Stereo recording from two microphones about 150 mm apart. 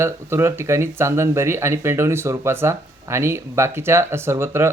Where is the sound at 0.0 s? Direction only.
15° right (ahead or behind).